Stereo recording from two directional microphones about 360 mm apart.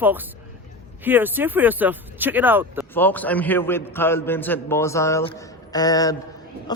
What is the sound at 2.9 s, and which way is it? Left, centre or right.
A man's voice, centre.